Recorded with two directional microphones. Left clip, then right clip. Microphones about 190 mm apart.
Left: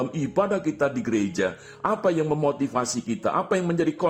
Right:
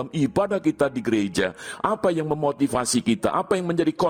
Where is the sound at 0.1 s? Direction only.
50° right (ahead or behind).